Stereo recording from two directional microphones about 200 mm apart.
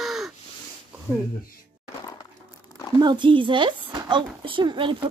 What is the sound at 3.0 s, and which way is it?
Speech, 25° right (ahead or behind).